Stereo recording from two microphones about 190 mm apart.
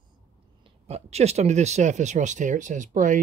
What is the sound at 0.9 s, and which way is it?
Speech, 35° right (ahead or behind).